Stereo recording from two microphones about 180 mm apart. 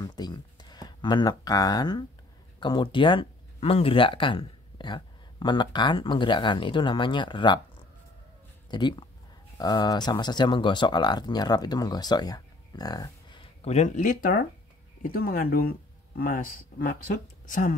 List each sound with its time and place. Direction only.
0.0 s a sound: 20° left (ahead or behind)
2.6 s speech: 25° left (ahead or behind)
8.6 s speech: 25° left (ahead or behind)
13.7 s speech: 40° left (ahead or behind)